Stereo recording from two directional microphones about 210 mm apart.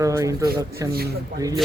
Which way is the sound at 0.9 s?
45° right (ahead or behind).